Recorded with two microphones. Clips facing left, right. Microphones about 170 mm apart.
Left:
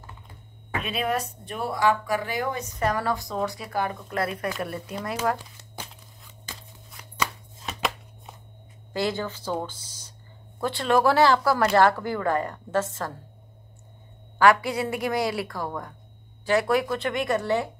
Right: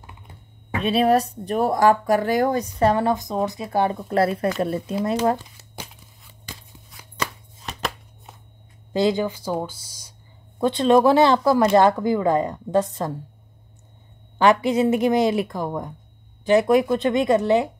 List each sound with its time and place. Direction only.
0.8 s speech: 35° right (ahead or behind)
7.2 s chopping: centre (ahead or behind)
8.9 s speech: 15° right (ahead or behind)
14.4 s speech: 20° right (ahead or behind)